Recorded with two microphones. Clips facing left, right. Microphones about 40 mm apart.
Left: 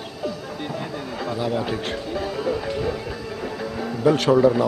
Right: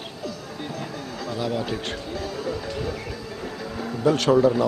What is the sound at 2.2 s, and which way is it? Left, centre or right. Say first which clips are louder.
Music: left 5 dB; left.